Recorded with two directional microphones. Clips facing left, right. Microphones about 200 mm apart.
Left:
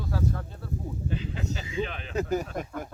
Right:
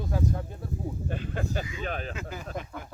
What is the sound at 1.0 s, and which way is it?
Speech, 50° right (ahead or behind).